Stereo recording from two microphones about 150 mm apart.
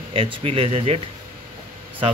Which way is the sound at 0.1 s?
40° right (ahead or behind).